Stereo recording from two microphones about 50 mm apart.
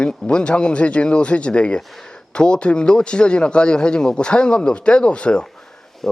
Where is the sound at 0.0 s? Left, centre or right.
Centre.